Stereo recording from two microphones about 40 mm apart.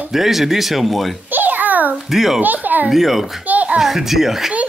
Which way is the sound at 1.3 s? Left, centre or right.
Right.